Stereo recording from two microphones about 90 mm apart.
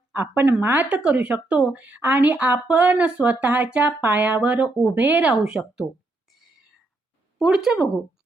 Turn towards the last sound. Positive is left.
turn(degrees=-5)  # may be behind; listen again after turning